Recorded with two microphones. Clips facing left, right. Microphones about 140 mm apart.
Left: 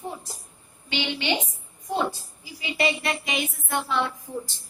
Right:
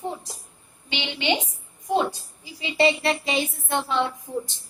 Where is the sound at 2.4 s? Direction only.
25° right (ahead or behind).